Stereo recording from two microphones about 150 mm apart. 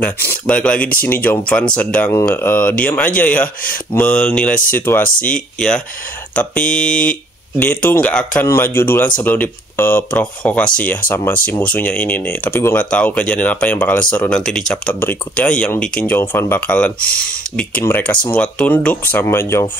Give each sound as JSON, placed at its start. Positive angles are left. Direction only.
{"t": 0.0, "sound": "speech", "side_deg": 10}